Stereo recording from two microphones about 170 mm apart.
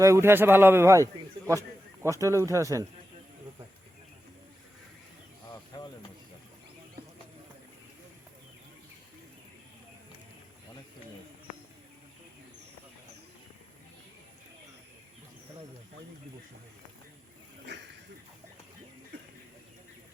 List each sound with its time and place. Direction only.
0.0 s a man's voice: 15° right (ahead or behind)
1.5 s a sound: 15° right (ahead or behind)
2.2 s speech: 20° right (ahead or behind)
5.5 s bird: 25° left (ahead or behind)